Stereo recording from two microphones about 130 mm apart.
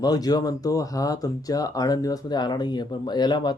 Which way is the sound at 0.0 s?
30° left (ahead or behind).